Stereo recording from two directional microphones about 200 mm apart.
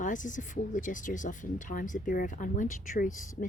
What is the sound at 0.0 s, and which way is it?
Speech, 40° left (ahead or behind).